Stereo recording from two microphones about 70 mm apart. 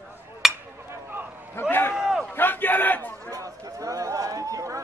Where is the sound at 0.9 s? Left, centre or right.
Right.